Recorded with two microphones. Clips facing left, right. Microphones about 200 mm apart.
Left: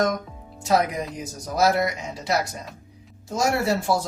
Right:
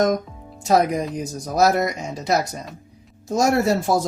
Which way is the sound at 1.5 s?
45° right (ahead or behind).